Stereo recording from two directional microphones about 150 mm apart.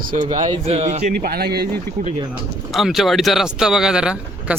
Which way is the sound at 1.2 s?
90° right.